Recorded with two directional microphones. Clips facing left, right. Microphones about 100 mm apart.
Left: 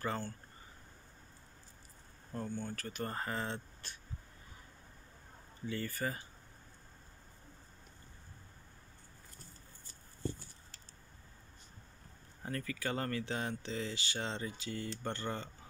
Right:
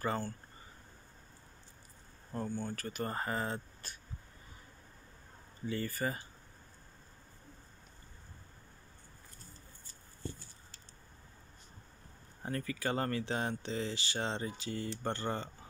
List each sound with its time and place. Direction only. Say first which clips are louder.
0.0 s speech: right 3 dB; 10° right (ahead or behind)
2.3 s speech: right 2 dB; 5° right (ahead or behind)
5.7 s speech: right 2 dB; 5° right (ahead or behind)
12.4 s speech: right 3 dB; 30° right (ahead or behind)